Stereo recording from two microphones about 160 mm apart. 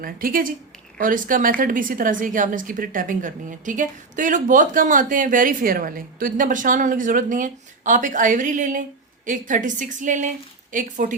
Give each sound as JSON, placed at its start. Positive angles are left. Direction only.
{"t": 0.0, "sound": "a woman's voice", "side_deg": -60}